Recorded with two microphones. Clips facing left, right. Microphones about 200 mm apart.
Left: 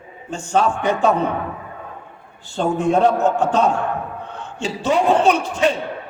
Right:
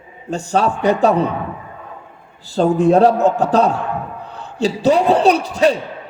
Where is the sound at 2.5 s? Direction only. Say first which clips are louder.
Right 5 dB; 35° right (ahead or behind).